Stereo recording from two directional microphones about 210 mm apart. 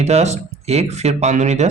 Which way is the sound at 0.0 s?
30° right (ahead or behind).